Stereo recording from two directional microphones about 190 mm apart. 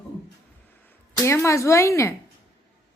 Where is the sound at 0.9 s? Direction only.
10° left (ahead or behind).